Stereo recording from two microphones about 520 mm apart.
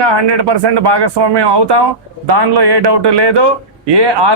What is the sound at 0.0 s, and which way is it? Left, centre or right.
Speech, right.